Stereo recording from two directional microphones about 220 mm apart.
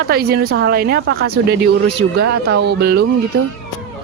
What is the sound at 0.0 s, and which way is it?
Speech, 45° right (ahead or behind).